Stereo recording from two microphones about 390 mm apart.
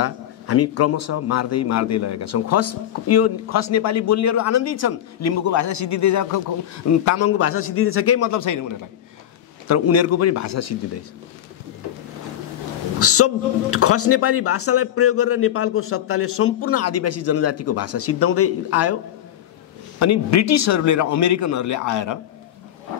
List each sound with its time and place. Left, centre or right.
0.0 s a man's voice: left
9.7 s a man's voice: left
13.0 s a man's voice: left
20.0 s a man's voice: left